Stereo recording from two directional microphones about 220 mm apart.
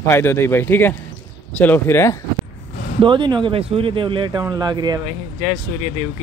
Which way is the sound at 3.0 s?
20° right (ahead or behind).